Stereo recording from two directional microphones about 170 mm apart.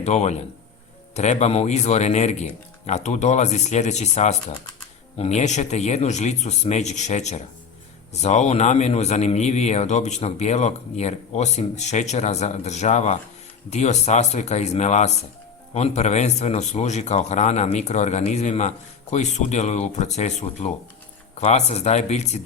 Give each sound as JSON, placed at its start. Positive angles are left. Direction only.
{"t": 0.0, "sound": "a man's voice", "side_deg": 40}